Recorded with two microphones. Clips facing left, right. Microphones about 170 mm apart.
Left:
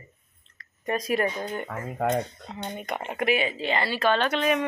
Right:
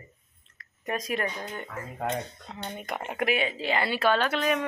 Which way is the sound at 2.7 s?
Centre (ahead or behind).